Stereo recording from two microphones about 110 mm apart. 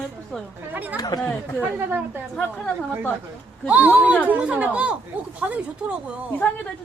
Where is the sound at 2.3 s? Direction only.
5° left (ahead or behind).